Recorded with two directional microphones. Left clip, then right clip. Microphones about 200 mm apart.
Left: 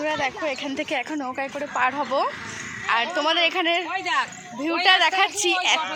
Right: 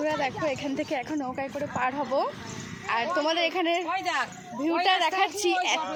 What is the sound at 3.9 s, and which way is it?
Speech, 55° right (ahead or behind).